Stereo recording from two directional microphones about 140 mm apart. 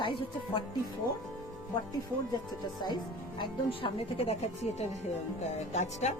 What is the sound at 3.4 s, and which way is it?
Speech, 40° left (ahead or behind).